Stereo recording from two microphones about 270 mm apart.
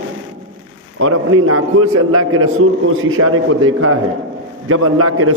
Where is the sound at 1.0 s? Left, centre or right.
Right.